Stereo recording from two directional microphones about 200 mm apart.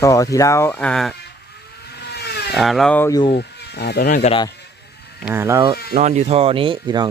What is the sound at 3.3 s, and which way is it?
Speech, 55° left (ahead or behind).